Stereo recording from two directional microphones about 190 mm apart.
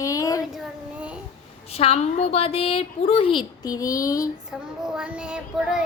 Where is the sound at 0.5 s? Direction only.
5° right (ahead or behind).